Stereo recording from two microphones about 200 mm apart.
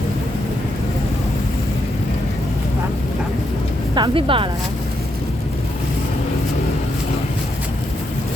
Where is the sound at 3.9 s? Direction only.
25° right (ahead or behind).